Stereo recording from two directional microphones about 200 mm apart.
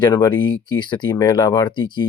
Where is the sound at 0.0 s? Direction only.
20° left (ahead or behind).